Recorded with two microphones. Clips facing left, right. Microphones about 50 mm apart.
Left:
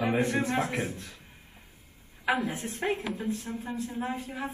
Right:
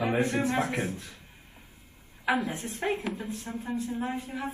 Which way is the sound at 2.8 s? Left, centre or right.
Centre.